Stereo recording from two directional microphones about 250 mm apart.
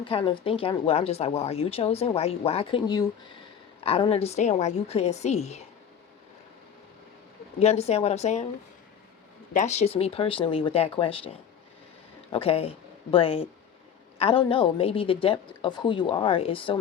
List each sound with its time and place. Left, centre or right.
0.0 s speech: left
7.6 s speech: left
9.5 s speech: left